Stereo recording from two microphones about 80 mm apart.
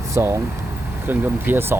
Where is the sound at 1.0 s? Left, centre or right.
Right.